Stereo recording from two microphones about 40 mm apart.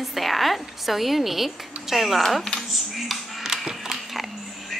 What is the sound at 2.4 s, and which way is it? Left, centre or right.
Speech, centre.